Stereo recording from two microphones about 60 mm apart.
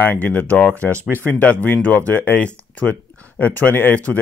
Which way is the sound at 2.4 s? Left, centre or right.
Left.